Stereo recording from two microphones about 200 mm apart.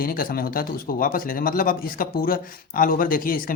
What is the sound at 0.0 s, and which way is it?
Speech, 45° left (ahead or behind).